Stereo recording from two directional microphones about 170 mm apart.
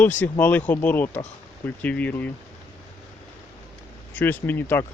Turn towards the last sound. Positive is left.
turn(degrees=10)  # may be behind; listen again after turning